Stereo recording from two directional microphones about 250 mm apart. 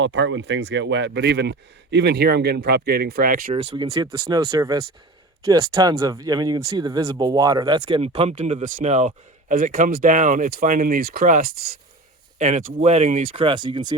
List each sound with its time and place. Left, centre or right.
0.0 s speech: right; by 13.9 s centre